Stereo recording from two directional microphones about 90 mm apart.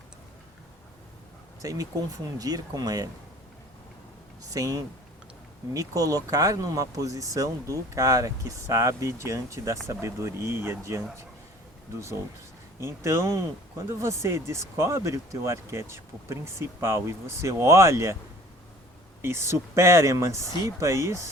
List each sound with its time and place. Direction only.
1.6 s speech: 40° right (ahead or behind)
4.5 s speech: 40° right (ahead or behind)
12.8 s speech: 30° right (ahead or behind)
19.2 s speech: 30° right (ahead or behind)